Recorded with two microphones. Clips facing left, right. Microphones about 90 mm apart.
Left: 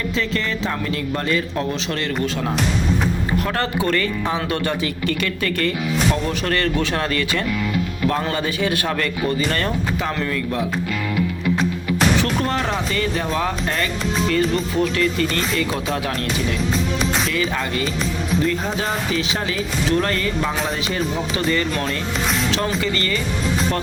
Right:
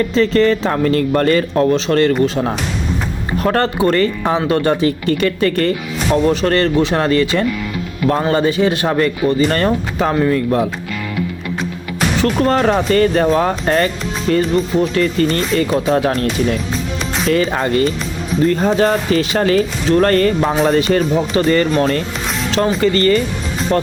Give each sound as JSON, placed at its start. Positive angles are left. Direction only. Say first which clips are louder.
{"t": 0.1, "sound": "speech", "louder": "right 10 dB", "side_deg": -40}
{"t": 2.2, "sound": "speech", "louder": "right 6 dB", "side_deg": -30}
{"t": 3.4, "sound": "speech", "louder": "right 11 dB", "side_deg": -45}
{"t": 12.2, "sound": "speech", "louder": "right 7 dB", "side_deg": -40}
{"t": 17.2, "sound": "speech", "louder": "right 7 dB", "side_deg": -45}
{"t": 23.7, "sound": "speech", "louder": "right 8 dB", "side_deg": -30}